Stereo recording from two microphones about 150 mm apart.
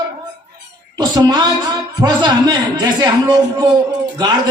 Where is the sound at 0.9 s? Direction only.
30° right (ahead or behind).